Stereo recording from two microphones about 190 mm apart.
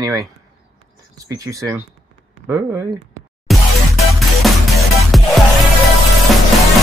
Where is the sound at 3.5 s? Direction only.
Centre (ahead or behind).